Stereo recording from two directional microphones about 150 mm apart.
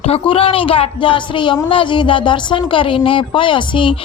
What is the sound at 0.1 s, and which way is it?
Speech, 35° left (ahead or behind).